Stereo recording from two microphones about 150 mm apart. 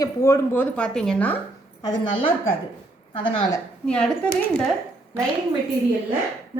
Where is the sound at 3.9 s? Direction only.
5° left (ahead or behind).